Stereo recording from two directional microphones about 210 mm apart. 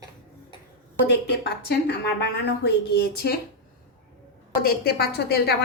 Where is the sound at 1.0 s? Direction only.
55° left (ahead or behind).